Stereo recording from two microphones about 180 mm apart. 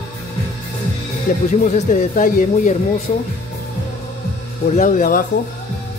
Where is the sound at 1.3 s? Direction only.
45° left (ahead or behind).